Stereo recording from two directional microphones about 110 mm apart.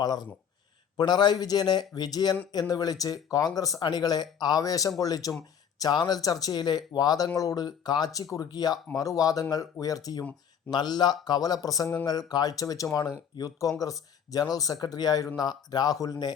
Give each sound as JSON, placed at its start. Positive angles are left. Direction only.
{"t": 0.0, "sound": "speech", "side_deg": 40}